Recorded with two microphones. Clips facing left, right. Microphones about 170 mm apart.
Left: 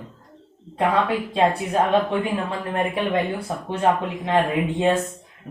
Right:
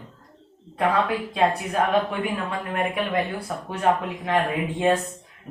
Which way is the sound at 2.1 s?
30° left (ahead or behind).